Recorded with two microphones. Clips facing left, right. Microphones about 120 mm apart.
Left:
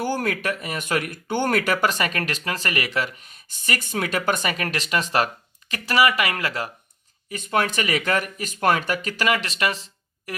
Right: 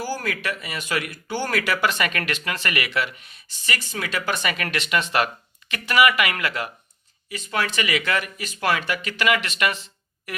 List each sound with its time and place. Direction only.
0.0 s speech: 55° left (ahead or behind); by 6.7 s 35° left (ahead or behind)
7.3 s speech: 50° left (ahead or behind); by 10.3 s 35° left (ahead or behind)